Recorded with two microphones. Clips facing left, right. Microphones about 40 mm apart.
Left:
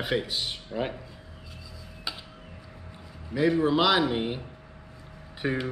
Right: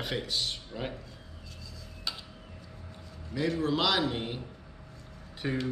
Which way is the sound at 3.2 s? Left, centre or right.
Centre.